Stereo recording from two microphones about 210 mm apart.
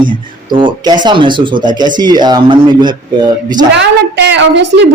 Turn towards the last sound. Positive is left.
turn(degrees=-55)  # may be behind; listen again after turning